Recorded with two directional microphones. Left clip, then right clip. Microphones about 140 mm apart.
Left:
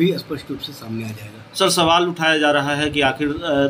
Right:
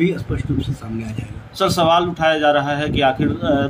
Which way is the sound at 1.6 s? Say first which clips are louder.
Even; 10° right (ahead or behind).